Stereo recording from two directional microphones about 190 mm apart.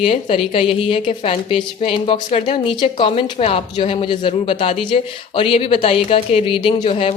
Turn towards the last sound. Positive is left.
turn(degrees=25)  # may be behind; listen again after turning